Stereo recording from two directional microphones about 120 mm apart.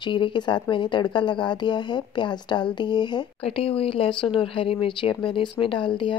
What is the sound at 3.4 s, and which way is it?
Speech, 55° left (ahead or behind).